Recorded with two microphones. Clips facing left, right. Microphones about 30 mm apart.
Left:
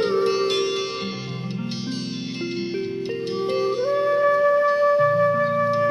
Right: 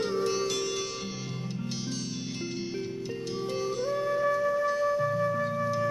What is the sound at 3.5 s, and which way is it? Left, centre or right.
Music, left.